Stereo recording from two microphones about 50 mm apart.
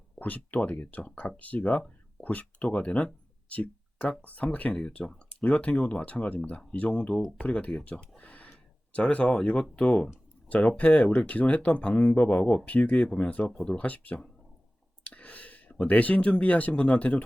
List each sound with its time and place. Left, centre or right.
0.2 s speech: left
13.5 s speech: centre
13.7 s speech: left
15.0 s a sound: left
15.7 s speech: left